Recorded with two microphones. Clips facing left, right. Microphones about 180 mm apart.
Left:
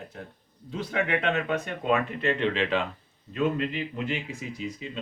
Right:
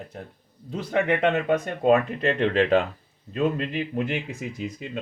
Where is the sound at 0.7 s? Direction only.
45° right (ahead or behind).